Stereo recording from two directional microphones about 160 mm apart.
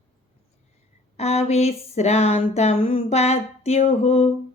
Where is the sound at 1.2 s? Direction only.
40° left (ahead or behind).